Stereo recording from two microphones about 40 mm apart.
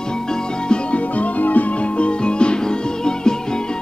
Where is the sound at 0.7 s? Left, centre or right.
Left.